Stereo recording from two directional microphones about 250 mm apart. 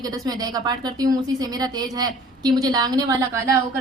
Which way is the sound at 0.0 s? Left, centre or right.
Centre.